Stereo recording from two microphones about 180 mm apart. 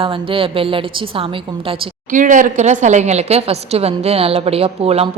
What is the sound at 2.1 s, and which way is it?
A woman's voice, 45° right (ahead or behind).